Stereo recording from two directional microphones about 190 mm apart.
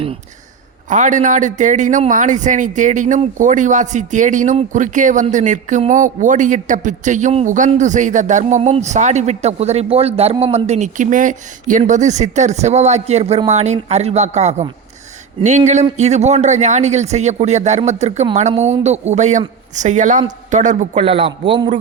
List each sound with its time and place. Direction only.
0.9 s a man's voice: 40° right (ahead or behind); by 21.7 s 25° right (ahead or behind)